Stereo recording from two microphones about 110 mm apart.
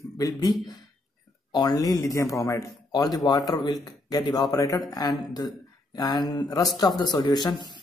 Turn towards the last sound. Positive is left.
turn(degrees=40)  # may be behind; listen again after turning